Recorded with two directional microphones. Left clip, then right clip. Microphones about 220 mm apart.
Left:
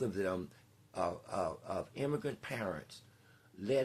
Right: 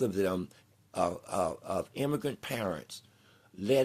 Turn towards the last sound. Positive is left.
turn(degrees=-50)  # may be behind; listen again after turning